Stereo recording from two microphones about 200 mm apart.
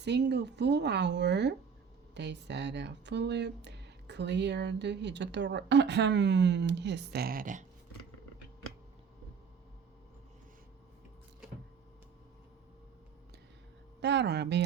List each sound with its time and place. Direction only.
0.0 s speech: 60° right (ahead or behind); by 7.6 s 45° right (ahead or behind)
14.0 s speech: 60° right (ahead or behind)